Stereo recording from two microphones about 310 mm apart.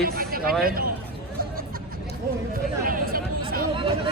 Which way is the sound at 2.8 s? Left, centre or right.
Right.